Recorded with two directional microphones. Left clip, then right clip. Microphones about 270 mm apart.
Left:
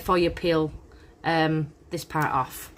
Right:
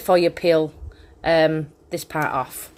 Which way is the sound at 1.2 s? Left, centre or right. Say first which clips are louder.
Right 7 dB; left.